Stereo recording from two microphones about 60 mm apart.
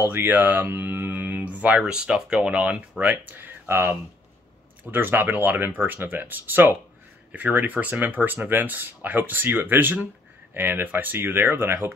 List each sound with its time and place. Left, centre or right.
0.1 s speech: right